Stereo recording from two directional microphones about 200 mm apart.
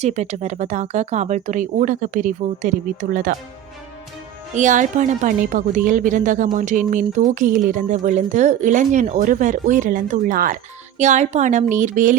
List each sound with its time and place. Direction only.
0.0 s speech: 35° right (ahead or behind)
4.5 s speech: 40° right (ahead or behind)